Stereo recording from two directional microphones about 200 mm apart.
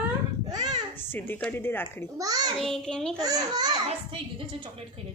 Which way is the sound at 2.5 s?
Centre (ahead or behind).